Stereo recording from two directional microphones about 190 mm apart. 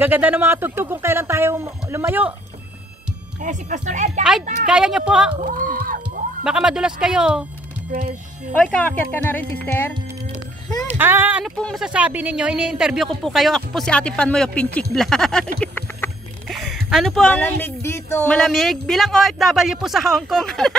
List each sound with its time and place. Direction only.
0.0 s speech: 10° right (ahead or behind)
3.4 s speech: 40° right (ahead or behind)
4.6 s speech: 5° right (ahead or behind)
5.4 s speech: 45° right (ahead or behind)
6.4 s speech: 5° right (ahead or behind)
8.5 s speech: 5° left (ahead or behind)
10.9 s speech: 10° right (ahead or behind)
11.5 s speech: 5° left (ahead or behind)